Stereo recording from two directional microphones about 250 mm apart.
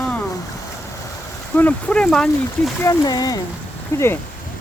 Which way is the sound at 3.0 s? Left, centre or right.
Centre.